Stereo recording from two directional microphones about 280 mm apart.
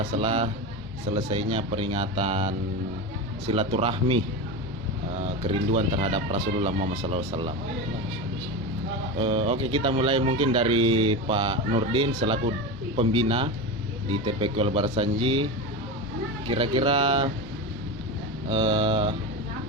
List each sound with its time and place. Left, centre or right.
0.2 s speech: centre
5.5 s speech: right
9.1 s speech: right
16.5 s speech: centre
18.5 s speech: centre